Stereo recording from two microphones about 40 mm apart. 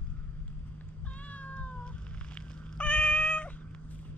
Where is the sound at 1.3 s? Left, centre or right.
Left.